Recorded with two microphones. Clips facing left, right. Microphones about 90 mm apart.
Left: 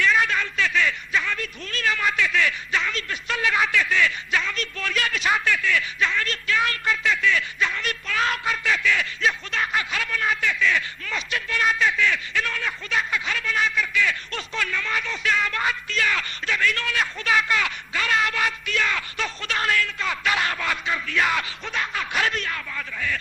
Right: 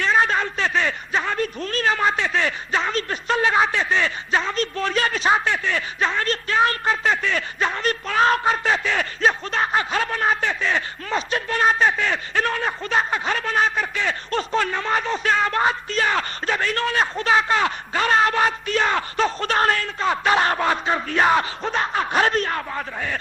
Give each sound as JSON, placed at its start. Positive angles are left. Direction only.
{"t": 0.0, "sound": "a man's voice", "side_deg": -35}